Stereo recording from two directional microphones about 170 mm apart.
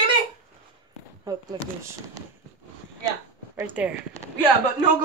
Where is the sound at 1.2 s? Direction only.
20° right (ahead or behind).